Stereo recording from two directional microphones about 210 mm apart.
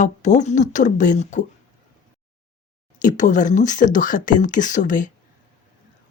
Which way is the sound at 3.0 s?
35° left (ahead or behind).